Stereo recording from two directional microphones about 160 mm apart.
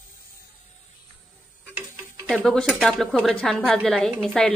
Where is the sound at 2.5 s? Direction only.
Centre (ahead or behind).